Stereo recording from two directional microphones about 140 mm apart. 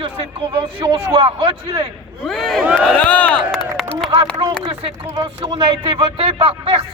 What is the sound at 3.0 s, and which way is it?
Speech, 10° left (ahead or behind).